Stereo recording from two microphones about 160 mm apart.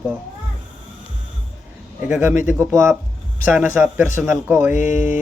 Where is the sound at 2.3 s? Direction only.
55° left (ahead or behind).